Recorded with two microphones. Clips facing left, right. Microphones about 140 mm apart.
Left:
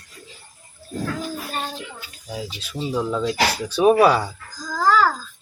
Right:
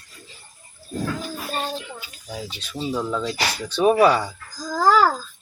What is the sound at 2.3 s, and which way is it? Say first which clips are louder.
Speech: left 2 dB; 10° left (ahead or behind).